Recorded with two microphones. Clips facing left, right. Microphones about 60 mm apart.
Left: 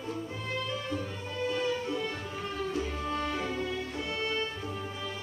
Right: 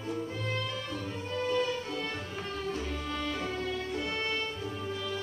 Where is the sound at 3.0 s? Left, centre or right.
Centre.